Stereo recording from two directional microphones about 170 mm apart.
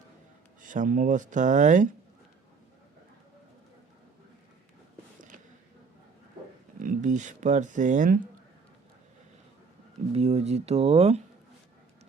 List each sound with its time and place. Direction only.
0.6 s speech: 50° right (ahead or behind)
6.7 s speech: 50° right (ahead or behind)
10.2 s speech: 40° right (ahead or behind)